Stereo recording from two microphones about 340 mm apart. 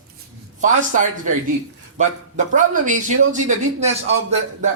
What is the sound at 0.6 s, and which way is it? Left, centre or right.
A man's voice, right.